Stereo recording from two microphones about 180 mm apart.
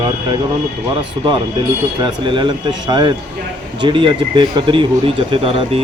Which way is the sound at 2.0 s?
25° right (ahead or behind).